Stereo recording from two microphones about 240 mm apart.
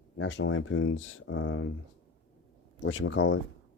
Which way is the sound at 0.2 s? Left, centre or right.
Left.